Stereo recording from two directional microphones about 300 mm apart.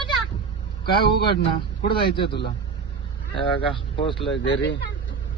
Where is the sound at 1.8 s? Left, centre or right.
Centre.